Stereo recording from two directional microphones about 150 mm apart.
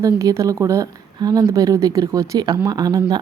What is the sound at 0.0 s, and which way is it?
Speech, 20° right (ahead or behind).